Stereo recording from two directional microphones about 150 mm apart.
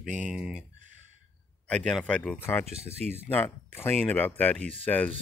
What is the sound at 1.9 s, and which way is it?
Speech, 5° left (ahead or behind).